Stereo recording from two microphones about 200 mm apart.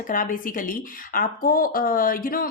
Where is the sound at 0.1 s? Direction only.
45° left (ahead or behind).